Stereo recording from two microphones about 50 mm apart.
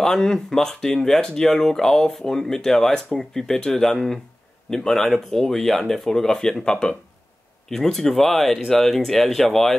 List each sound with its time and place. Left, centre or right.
0.0 s speech: centre